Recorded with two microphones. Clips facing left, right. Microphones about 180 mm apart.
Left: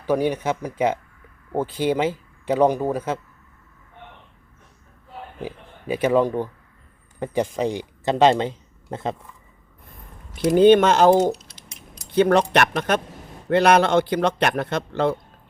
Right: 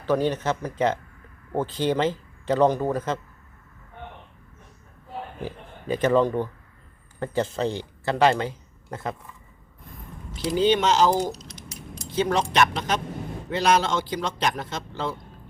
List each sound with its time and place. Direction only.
0.0 s speech: 10° left (ahead or behind)
5.4 s speech: 10° left (ahead or behind)
10.3 s a man's voice: 55° left (ahead or behind)
12.1 s a man's voice: 60° left (ahead or behind)